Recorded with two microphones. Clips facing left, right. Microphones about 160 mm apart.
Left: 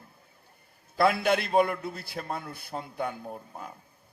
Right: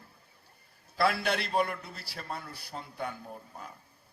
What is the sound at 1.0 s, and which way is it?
A man's voice, 50° left (ahead or behind).